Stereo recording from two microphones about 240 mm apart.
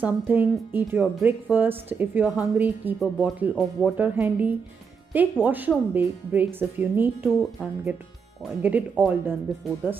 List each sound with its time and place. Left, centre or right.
0.0 s speech: centre